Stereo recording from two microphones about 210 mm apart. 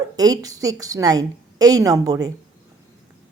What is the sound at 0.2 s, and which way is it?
A woman's voice, 15° right (ahead or behind).